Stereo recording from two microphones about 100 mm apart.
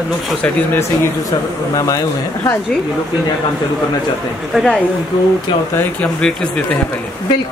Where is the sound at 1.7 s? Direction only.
35° left (ahead or behind).